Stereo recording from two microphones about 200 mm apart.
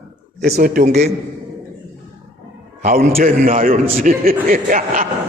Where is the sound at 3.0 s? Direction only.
45° right (ahead or behind).